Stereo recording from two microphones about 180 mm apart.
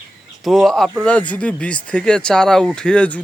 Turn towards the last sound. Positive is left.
turn(degrees=5)  # may be behind; listen again after turning